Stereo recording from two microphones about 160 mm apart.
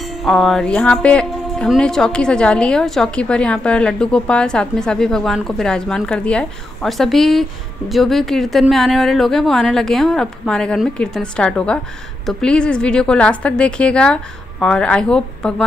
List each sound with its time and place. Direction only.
0.0 s speech: centre (ahead or behind)